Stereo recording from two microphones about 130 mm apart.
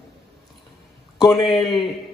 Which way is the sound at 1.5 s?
Centre (ahead or behind).